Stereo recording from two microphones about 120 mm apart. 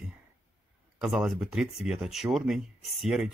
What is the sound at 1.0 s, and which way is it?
Speech, 5° right (ahead or behind).